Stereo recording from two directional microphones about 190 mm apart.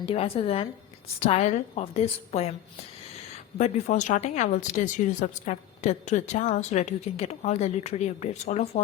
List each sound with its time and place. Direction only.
0.0 s speech: 30° left (ahead or behind)